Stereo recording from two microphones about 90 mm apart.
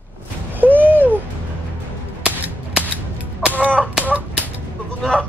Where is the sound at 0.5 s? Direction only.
20° right (ahead or behind).